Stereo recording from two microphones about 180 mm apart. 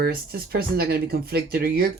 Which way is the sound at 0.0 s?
60° right (ahead or behind).